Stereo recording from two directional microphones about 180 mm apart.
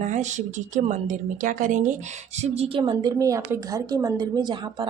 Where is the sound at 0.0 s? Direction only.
40° right (ahead or behind).